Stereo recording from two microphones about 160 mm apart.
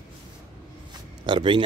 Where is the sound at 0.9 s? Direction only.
30° right (ahead or behind).